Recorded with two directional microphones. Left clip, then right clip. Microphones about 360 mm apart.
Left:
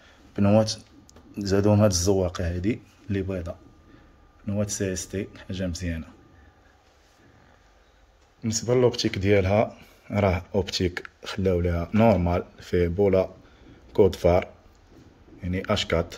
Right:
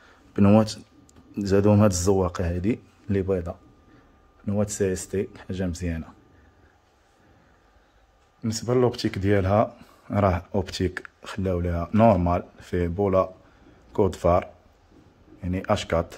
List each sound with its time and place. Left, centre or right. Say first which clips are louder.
0.3 s speech: right 1 dB; centre
8.4 s speech: left 1 dB; centre